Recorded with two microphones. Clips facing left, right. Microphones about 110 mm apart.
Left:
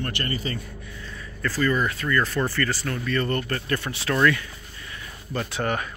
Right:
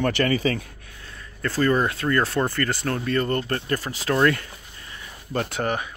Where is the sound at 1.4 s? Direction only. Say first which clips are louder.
Right 3 dB; 30° right (ahead or behind).